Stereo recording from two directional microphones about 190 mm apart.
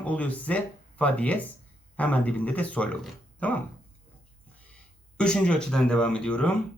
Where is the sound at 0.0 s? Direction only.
5° left (ahead or behind).